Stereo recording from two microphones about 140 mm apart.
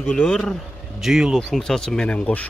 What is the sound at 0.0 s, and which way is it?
Speech, 5° left (ahead or behind).